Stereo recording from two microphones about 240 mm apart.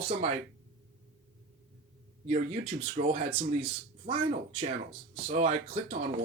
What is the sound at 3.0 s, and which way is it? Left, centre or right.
Speech, right.